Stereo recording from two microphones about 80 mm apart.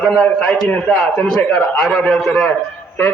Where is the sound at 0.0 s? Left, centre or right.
Centre.